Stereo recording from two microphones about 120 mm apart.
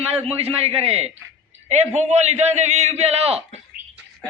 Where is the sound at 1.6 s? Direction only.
70° right (ahead or behind).